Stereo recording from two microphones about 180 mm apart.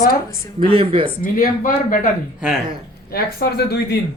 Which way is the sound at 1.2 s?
50° left (ahead or behind).